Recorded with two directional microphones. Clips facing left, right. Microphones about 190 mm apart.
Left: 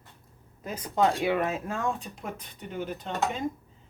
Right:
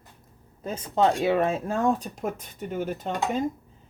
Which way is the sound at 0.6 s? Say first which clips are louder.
Right 3 dB; 25° right (ahead or behind).